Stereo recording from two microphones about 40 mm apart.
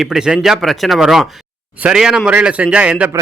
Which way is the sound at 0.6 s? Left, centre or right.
Centre.